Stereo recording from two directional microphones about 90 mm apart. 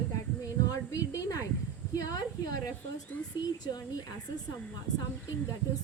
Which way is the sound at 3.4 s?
50° left (ahead or behind).